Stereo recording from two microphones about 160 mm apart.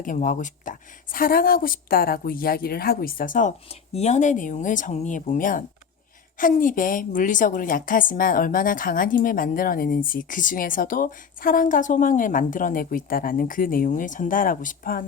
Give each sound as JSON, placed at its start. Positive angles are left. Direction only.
{"t": 0.0, "sound": "a woman's voice", "side_deg": 55}
{"t": 3.9, "sound": "a woman's voice", "side_deg": 45}